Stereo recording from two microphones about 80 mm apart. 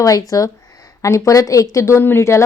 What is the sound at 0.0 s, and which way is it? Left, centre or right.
Speech, left.